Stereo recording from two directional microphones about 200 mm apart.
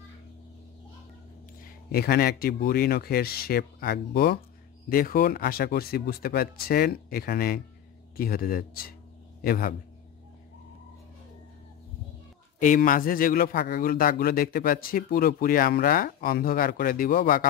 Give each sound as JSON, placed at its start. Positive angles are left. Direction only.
{"t": 1.6, "sound": "a man's voice", "side_deg": 50}
{"t": 12.5, "sound": "a man's voice", "side_deg": 40}